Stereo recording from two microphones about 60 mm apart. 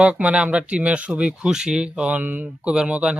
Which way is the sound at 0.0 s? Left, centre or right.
Right.